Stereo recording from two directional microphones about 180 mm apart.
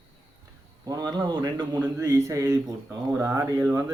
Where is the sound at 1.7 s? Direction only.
10° right (ahead or behind).